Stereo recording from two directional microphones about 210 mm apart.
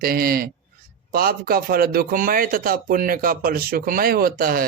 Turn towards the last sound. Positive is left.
turn(degrees=-45)  # may be behind; listen again after turning